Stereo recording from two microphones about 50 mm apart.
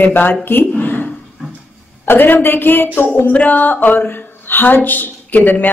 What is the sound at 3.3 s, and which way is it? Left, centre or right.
A woman's voice, left.